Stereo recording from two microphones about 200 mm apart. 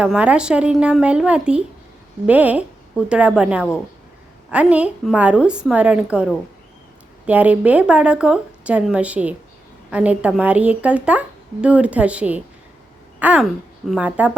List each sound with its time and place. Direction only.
0.0 s a woman's voice: 5° right (ahead or behind)